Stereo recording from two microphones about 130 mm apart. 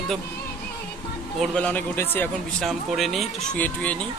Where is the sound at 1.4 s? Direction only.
5° left (ahead or behind).